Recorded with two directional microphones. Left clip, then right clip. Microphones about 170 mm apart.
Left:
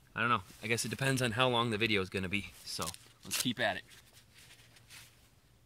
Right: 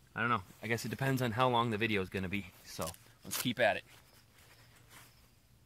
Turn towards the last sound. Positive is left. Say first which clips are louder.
# right 2 dB
turn(degrees=-25)  # may be behind; listen again after turning